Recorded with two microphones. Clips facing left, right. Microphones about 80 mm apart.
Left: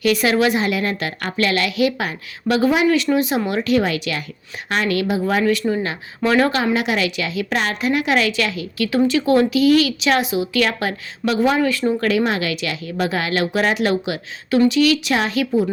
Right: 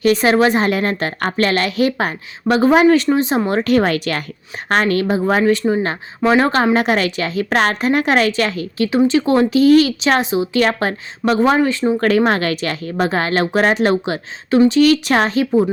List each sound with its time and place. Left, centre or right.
0.0 s a woman's voice: right
9.0 s a woman's voice: right
11.6 s speech: right
11.9 s a woman's voice: right